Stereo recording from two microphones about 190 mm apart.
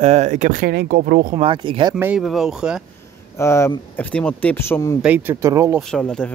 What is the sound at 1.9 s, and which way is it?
Speech, 10° right (ahead or behind).